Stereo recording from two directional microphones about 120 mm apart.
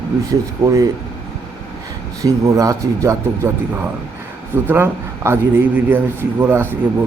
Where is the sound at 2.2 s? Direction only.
30° right (ahead or behind).